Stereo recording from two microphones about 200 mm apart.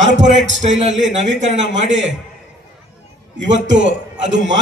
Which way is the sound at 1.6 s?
65° right (ahead or behind).